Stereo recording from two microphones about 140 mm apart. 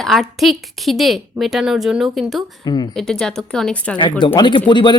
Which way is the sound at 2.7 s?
30° left (ahead or behind).